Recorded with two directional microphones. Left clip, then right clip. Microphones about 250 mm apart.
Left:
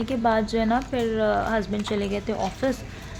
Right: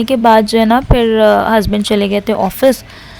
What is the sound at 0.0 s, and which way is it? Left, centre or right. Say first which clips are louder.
Speech: right 14 dB; right.